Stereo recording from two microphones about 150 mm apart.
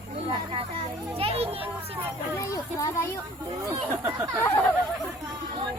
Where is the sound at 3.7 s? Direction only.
20° right (ahead or behind).